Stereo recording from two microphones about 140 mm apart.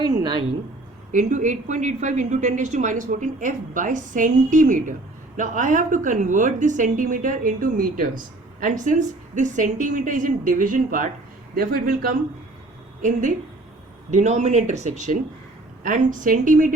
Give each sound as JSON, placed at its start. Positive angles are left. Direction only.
{"t": 0.0, "sound": "a sound", "side_deg": -35}
{"t": 1.1, "sound": "a woman's voice", "side_deg": -65}
{"t": 8.8, "sound": "a woman's voice", "side_deg": -65}
{"t": 11.5, "sound": "speech", "side_deg": -90}
{"t": 13.0, "sound": "a woman's voice", "side_deg": -65}
{"t": 15.8, "sound": "a woman's voice", "side_deg": -70}